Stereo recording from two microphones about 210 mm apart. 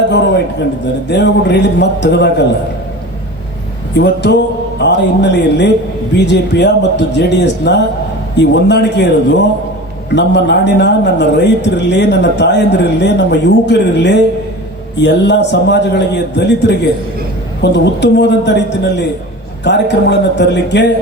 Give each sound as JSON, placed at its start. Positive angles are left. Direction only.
{"t": 0.1, "sound": "a sound", "side_deg": 55}
{"t": 1.0, "sound": "speech", "side_deg": 55}
{"t": 3.9, "sound": "speech", "side_deg": 55}